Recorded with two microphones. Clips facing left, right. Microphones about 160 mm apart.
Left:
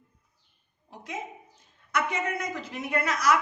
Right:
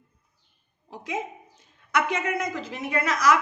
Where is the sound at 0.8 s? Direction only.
90° right.